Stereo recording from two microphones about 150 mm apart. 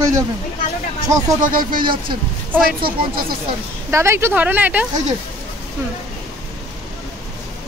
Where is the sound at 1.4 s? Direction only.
70° right (ahead or behind).